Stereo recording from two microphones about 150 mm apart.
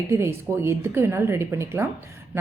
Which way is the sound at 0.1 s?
15° right (ahead or behind).